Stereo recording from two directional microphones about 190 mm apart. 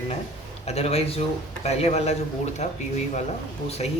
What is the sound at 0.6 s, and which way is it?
Speech, 35° left (ahead or behind).